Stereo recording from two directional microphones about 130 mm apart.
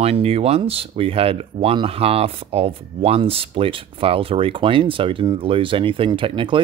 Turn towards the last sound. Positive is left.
turn(degrees=-40)  # may be behind; listen again after turning